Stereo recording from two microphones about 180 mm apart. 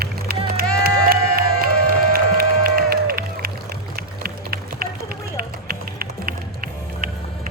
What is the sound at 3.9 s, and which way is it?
Run, 55° right (ahead or behind).